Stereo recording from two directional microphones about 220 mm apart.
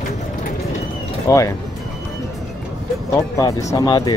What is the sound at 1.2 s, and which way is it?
Speech, 15° left (ahead or behind).